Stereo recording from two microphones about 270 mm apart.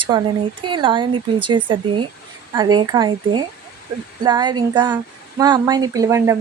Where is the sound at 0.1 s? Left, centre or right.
Centre.